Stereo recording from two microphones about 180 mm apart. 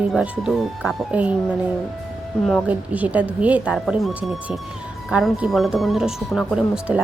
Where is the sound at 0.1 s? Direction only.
Centre (ahead or behind).